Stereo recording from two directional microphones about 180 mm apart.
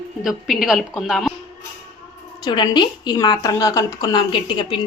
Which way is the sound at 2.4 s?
25° left (ahead or behind).